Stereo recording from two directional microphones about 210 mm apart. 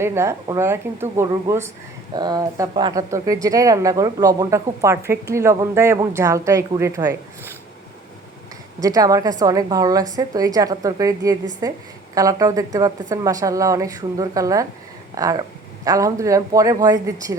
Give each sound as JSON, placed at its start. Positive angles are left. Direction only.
{"t": 0.0, "sound": "speech", "side_deg": -10}
{"t": 8.8, "sound": "speech", "side_deg": -15}